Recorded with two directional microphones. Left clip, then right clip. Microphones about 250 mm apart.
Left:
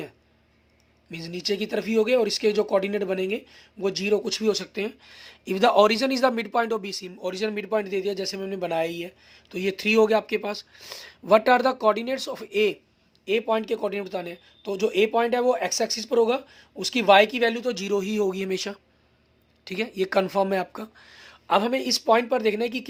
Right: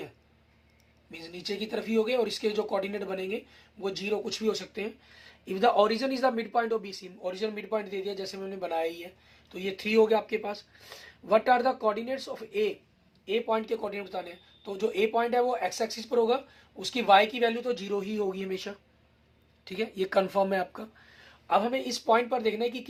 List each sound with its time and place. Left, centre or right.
1.1 s speech: left